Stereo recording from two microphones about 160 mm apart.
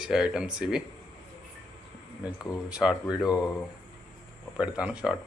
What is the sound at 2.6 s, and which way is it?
Speech, 5° right (ahead or behind).